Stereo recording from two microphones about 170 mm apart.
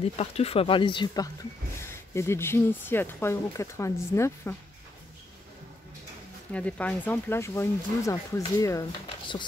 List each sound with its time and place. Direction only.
0.2 s speech: 35° left (ahead or behind); by 4.6 s 15° left (ahead or behind)
6.5 s speech: 10° left (ahead or behind)